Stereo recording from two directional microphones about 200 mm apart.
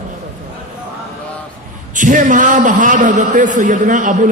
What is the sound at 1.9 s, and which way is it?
A man's voice, 40° right (ahead or behind).